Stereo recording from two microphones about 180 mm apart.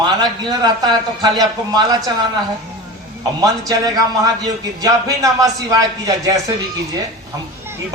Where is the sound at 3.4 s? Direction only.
20° right (ahead or behind).